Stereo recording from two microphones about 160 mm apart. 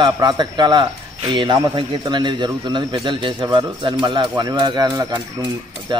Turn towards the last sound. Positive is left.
turn(degrees=-25)  # may be behind; listen again after turning